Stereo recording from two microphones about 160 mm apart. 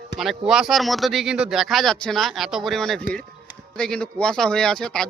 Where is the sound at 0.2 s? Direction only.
Centre (ahead or behind).